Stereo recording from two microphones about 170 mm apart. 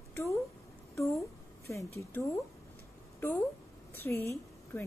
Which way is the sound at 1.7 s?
15° left (ahead or behind).